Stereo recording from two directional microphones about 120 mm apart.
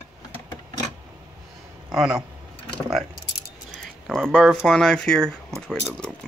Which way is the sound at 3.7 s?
5° left (ahead or behind).